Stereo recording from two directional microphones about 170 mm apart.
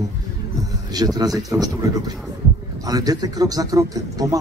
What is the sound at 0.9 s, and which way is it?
Speech, 20° right (ahead or behind).